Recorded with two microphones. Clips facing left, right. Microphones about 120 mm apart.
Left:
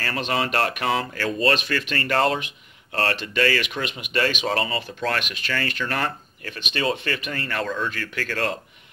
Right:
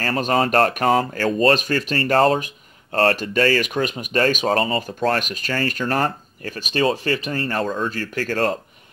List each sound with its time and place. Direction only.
0.0 s speech: 40° right (ahead or behind)